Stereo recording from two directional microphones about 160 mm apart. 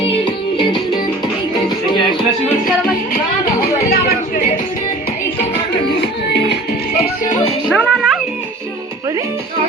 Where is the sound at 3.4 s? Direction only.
65° left (ahead or behind).